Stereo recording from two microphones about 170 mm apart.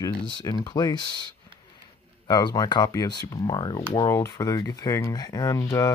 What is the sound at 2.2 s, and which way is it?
Speech, 20° left (ahead or behind).